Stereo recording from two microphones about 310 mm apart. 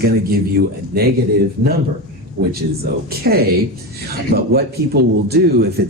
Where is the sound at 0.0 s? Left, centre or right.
Right.